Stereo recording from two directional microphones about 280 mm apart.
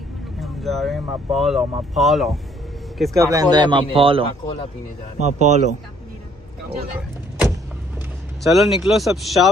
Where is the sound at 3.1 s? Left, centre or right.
Centre.